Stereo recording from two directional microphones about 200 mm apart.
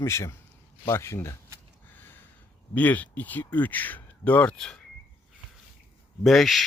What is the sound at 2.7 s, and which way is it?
Speech, 10° left (ahead or behind).